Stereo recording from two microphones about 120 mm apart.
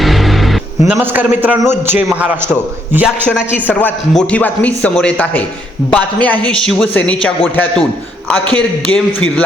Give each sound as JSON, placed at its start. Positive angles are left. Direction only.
{"t": 0.0, "sound": "music", "side_deg": 0}
{"t": 0.9, "sound": "a man's voice", "side_deg": -15}
{"t": 3.7, "sound": "speech", "side_deg": 15}